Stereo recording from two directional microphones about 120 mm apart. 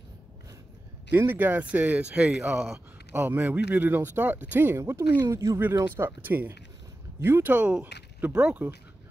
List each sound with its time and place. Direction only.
1.1 s speech: 15° right (ahead or behind)